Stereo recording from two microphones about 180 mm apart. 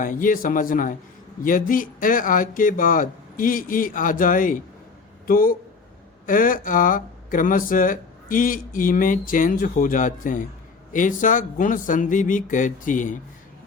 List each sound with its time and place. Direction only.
0.0 s speech: 50° left (ahead or behind)